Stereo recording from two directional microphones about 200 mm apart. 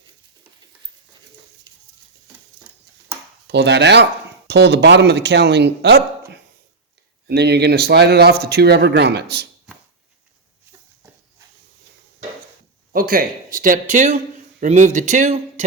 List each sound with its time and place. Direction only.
3.4 s speech: 60° right (ahead or behind)
12.9 s speech: 45° right (ahead or behind)